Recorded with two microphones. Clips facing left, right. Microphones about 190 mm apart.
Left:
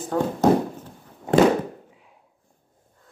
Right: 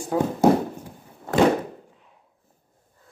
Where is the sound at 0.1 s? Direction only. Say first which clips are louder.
Right 1 dB; 10° right (ahead or behind).